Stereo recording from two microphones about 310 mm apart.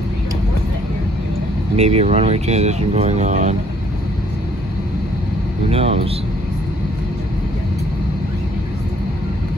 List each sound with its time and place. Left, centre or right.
1.8 s speech: centre
5.7 s speech: centre